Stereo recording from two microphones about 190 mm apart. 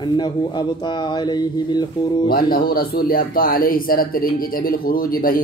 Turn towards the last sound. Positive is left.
turn(degrees=50)  # may be behind; listen again after turning